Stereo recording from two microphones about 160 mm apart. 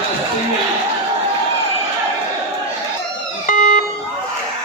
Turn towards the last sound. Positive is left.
turn(degrees=55)  # may be behind; listen again after turning